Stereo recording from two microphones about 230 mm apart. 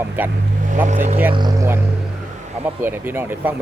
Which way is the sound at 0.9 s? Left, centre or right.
Right.